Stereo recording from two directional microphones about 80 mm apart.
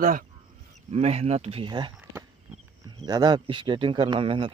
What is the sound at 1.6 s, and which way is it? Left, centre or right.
Speech, right.